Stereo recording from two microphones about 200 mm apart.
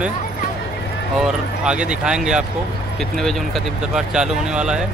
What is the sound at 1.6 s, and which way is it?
Speech, 5° right (ahead or behind).